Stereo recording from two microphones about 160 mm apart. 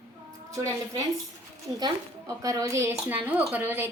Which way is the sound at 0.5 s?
20° right (ahead or behind).